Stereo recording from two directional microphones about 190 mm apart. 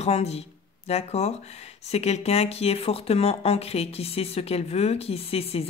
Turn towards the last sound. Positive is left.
turn(degrees=30)  # may be behind; listen again after turning